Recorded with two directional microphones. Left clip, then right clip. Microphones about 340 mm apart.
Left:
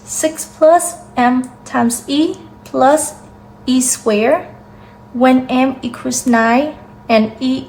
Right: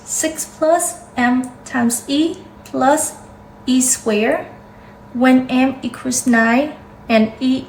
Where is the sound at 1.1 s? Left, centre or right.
Centre.